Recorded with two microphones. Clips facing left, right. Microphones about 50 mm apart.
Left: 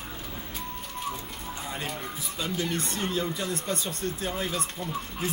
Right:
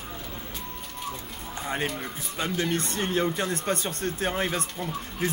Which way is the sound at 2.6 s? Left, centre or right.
Right.